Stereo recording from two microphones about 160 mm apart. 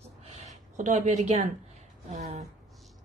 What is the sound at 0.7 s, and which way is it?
Speech, 50° right (ahead or behind).